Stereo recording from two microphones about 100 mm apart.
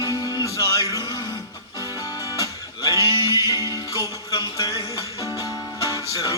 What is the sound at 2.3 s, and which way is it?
Music, 35° left (ahead or behind).